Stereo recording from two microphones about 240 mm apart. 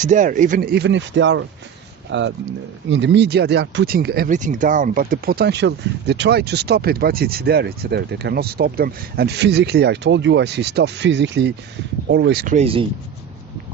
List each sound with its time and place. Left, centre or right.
0.0 s speech: right
12.5 s speech: right